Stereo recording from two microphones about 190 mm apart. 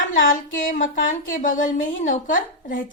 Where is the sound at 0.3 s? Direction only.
45° left (ahead or behind).